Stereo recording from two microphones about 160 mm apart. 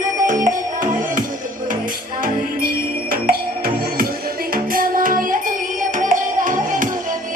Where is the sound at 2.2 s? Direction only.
65° right (ahead or behind).